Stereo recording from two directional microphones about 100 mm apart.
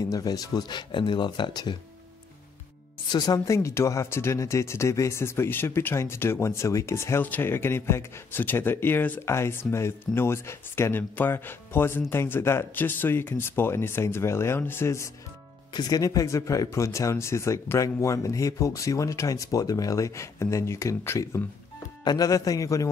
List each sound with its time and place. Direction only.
0.0 s speech: 40° left (ahead or behind)
3.1 s speech: 40° left (ahead or behind)
3.5 s speech: 30° left (ahead or behind)
15.7 s speech: 40° left (ahead or behind)